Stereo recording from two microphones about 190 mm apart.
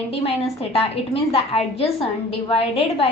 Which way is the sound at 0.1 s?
30° left (ahead or behind).